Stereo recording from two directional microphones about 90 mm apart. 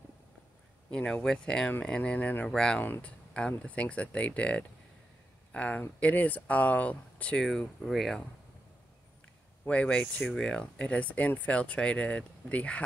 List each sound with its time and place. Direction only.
0.8 s speech: 15° left (ahead or behind)
2.8 s speech: 20° left (ahead or behind)
7.4 s speech: 5° left (ahead or behind)
9.7 s speech: 10° left (ahead or behind)